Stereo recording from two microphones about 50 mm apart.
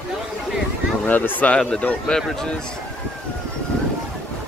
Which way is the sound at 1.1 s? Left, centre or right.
Left.